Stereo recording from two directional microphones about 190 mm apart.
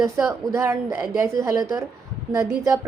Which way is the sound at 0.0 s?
15° right (ahead or behind).